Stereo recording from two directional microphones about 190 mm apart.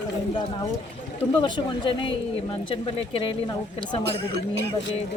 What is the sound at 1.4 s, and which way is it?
Speech, 25° left (ahead or behind).